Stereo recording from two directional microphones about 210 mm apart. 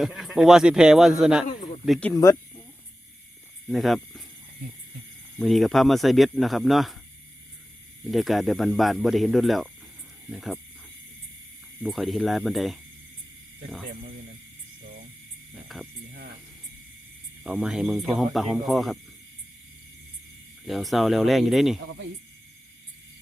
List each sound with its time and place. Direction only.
0.0 s speech: centre (ahead or behind)
1.5 s a sound: 40° left (ahead or behind)
1.8 s speech: 5° left (ahead or behind)
3.7 s speech: centre (ahead or behind)
5.4 s speech: centre (ahead or behind)
8.0 s speech: centre (ahead or behind)
11.8 s speech: centre (ahead or behind)
15.7 s speech: centre (ahead or behind)
17.4 s speech: 5° right (ahead or behind)
20.7 s speech: centre (ahead or behind)